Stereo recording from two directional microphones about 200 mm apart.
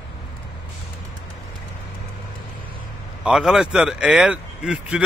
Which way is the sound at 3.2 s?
5° right (ahead or behind).